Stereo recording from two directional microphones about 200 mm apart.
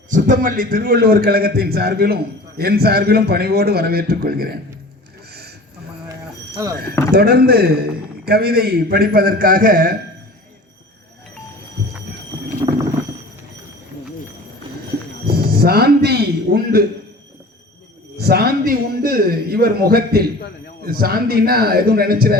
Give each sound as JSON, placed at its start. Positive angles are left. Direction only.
{"t": 0.1, "sound": "a man's voice", "side_deg": -40}
{"t": 5.3, "sound": "a sound", "side_deg": -50}
{"t": 7.1, "sound": "a man's voice", "side_deg": -50}
{"t": 15.3, "sound": "a man's voice", "side_deg": -50}
{"t": 18.2, "sound": "a man's voice", "side_deg": -50}